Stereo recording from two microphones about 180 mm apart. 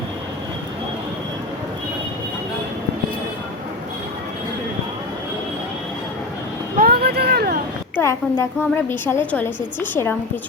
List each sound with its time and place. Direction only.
6.7 s vehicle: 55° right (ahead or behind)
7.9 s a woman's voice: 15° left (ahead or behind)